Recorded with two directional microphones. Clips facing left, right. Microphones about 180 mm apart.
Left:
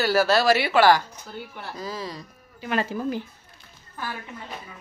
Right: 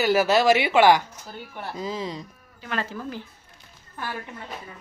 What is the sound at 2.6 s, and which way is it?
Speech, 15° left (ahead or behind).